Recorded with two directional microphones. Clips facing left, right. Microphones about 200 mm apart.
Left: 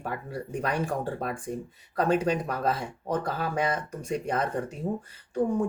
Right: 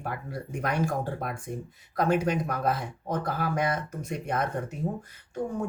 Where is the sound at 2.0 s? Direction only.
30° left (ahead or behind).